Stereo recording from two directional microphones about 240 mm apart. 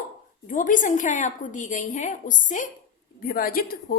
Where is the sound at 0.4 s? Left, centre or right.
Left.